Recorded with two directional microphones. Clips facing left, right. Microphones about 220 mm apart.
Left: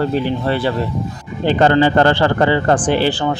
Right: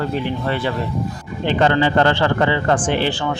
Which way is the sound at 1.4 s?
40° left (ahead or behind).